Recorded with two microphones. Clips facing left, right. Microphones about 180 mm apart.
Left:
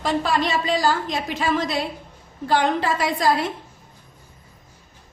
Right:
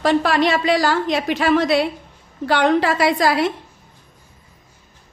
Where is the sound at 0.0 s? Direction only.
70° right (ahead or behind).